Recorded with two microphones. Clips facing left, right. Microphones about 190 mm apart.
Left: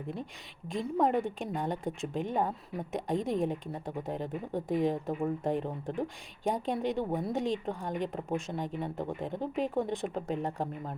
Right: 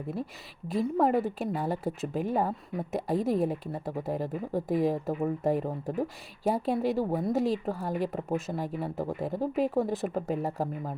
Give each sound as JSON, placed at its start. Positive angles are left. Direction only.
{"t": 0.7, "sound": "speech", "side_deg": -5}